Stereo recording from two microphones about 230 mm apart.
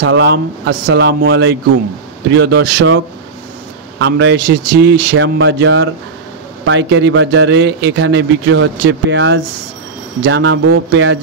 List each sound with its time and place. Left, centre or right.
0.0 s a man's voice: right
4.0 s a man's voice: right